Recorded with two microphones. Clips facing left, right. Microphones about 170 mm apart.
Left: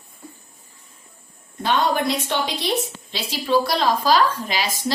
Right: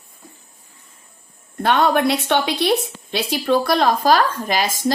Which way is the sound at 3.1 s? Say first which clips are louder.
Right 2 dB; 55° right (ahead or behind).